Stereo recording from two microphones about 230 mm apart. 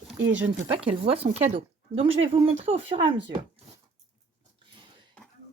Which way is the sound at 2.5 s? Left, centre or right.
Right.